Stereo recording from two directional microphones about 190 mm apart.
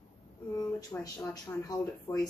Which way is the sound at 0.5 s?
20° left (ahead or behind).